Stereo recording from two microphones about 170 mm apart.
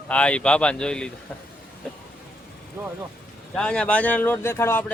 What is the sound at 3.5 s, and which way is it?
Speech, 5° left (ahead or behind).